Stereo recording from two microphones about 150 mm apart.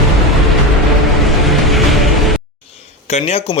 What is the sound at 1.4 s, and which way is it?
Music, centre (ahead or behind).